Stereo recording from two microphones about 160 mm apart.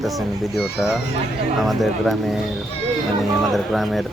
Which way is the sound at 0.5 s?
Centre (ahead or behind).